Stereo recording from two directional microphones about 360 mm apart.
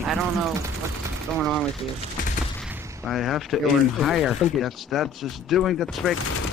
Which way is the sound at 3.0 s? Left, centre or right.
Centre.